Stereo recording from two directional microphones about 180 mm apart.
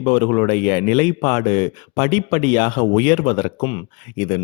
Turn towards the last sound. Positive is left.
turn(degrees=35)  # may be behind; listen again after turning